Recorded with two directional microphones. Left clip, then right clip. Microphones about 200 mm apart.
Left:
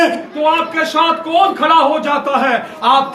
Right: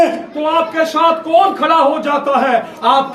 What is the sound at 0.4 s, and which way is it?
A man's voice, centre (ahead or behind).